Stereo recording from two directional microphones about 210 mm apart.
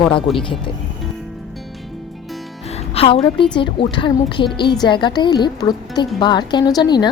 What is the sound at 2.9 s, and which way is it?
A woman's voice, 30° left (ahead or behind).